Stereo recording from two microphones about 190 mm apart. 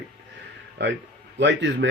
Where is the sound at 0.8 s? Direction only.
70° right (ahead or behind).